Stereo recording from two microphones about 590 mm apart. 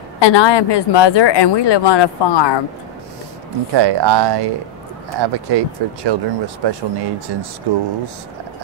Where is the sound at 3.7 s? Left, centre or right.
Right.